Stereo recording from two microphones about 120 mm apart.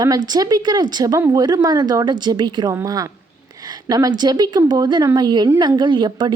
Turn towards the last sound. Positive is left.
turn(degrees=-40)  # may be behind; listen again after turning